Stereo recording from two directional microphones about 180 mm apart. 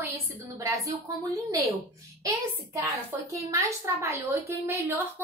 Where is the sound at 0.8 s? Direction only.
20° right (ahead or behind).